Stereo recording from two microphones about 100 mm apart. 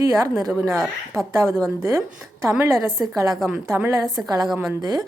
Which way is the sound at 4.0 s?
40° right (ahead or behind).